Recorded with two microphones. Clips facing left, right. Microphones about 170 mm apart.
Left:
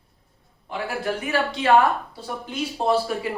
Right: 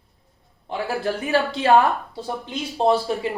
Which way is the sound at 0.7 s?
35° right (ahead or behind).